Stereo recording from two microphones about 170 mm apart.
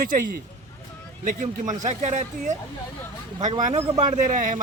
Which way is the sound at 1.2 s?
50° right (ahead or behind).